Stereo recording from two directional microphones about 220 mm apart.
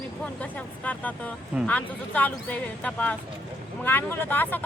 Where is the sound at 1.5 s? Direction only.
5° left (ahead or behind).